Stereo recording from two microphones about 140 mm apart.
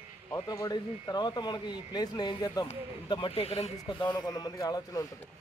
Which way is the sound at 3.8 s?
35° left (ahead or behind).